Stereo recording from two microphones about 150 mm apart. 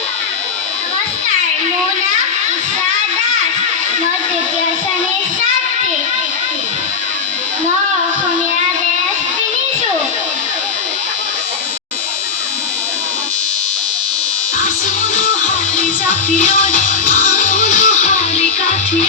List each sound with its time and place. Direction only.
16.4 s music: 60° left (ahead or behind)